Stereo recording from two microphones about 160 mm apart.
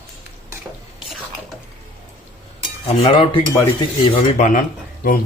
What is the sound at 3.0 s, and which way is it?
Speech, 35° left (ahead or behind).